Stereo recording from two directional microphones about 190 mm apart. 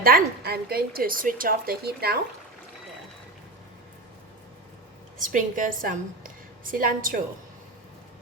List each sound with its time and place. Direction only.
0.0 s a woman's voice: 55° right (ahead or behind)
5.2 s a woman's voice: 45° right (ahead or behind)